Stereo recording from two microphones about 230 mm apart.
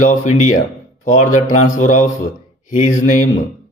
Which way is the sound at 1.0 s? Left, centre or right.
Left.